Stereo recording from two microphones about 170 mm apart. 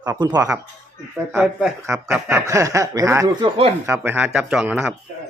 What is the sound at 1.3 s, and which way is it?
Speech, 5° right (ahead or behind).